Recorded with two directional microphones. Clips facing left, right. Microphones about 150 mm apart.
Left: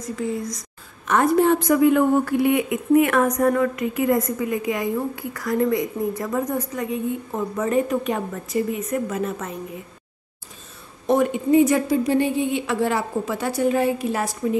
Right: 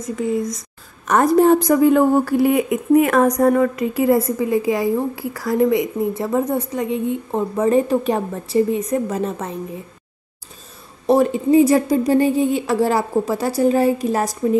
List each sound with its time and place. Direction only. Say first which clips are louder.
0.0 s a woman's voice: right 5 dB; 20° right (ahead or behind)
1.0 s a woman's voice: right 4 dB; 40° right (ahead or behind)
11.1 s a woman's voice: right 4 dB; 30° right (ahead or behind)